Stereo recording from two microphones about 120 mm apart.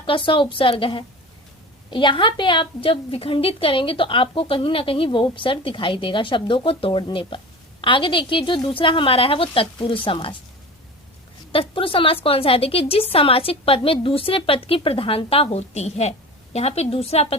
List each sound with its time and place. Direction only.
0.0 s a woman's voice: 45° left (ahead or behind)
11.5 s a woman's voice: 50° left (ahead or behind)